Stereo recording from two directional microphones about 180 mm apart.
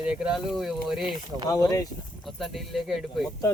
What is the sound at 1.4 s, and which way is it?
Speech, 20° left (ahead or behind).